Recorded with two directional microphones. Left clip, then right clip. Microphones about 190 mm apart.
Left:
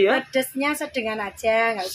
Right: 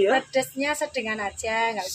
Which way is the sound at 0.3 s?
40° left (ahead or behind).